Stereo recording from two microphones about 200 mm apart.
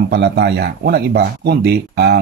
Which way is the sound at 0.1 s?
55° right (ahead or behind).